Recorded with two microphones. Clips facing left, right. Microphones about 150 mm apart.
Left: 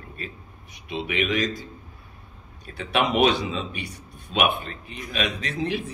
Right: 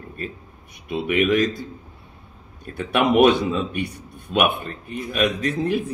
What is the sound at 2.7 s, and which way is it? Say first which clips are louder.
A man's voice: right 4 dB; 55° right (ahead or behind).